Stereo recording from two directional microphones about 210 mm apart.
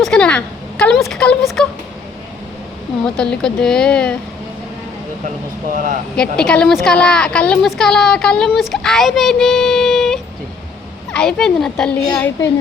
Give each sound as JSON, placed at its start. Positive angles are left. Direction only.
{"t": 0.0, "sound": "a sound", "side_deg": 5}
{"t": 3.0, "sound": "a woman's voice", "side_deg": 5}
{"t": 5.7, "sound": "speech", "side_deg": -40}
{"t": 6.1, "sound": "a woman's voice", "side_deg": 5}